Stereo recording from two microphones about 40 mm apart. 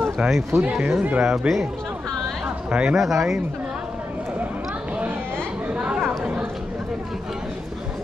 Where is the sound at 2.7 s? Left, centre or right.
Right.